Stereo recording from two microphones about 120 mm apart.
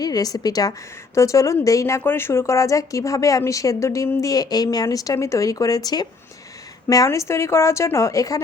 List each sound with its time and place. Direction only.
0.0 s a woman's voice: 30° left (ahead or behind)